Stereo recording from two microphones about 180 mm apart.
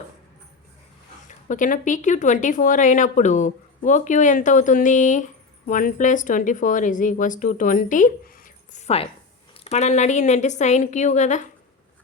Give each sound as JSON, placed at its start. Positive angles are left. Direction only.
{"t": 1.3, "sound": "a woman's voice", "side_deg": 45}